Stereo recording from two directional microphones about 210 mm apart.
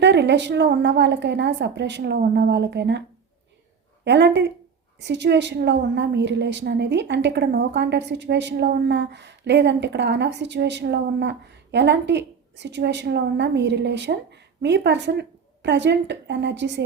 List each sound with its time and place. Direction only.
0.0 s a woman's voice: 55° right (ahead or behind)
4.0 s a woman's voice: 55° right (ahead or behind)